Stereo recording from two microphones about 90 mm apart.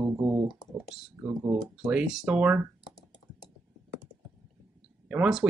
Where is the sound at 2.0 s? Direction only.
5° right (ahead or behind).